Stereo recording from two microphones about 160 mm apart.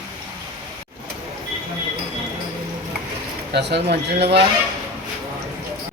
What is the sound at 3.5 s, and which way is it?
Speech, 90° right.